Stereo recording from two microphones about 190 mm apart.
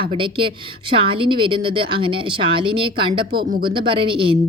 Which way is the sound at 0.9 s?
25° right (ahead or behind).